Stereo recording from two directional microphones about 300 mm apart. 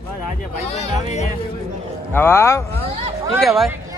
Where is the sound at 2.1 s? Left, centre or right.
Centre.